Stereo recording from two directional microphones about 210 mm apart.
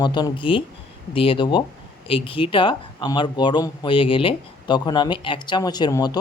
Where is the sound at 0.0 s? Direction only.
20° left (ahead or behind).